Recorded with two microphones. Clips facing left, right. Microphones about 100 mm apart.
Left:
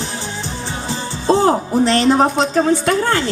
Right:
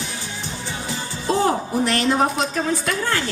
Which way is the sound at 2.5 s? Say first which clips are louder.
Left 8 dB; 35° left (ahead or behind).